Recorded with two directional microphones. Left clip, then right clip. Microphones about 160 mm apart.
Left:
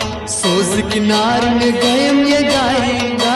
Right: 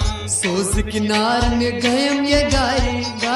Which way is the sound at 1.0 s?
15° left (ahead or behind).